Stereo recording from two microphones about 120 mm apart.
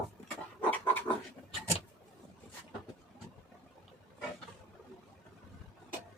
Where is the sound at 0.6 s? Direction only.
15° left (ahead or behind).